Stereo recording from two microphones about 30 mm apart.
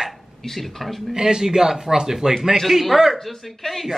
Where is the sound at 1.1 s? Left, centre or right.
Right.